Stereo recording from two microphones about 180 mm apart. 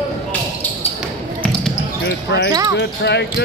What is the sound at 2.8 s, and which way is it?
Speech, 70° left (ahead or behind).